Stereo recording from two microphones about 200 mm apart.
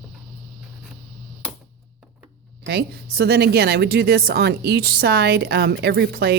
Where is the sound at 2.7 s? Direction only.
55° right (ahead or behind).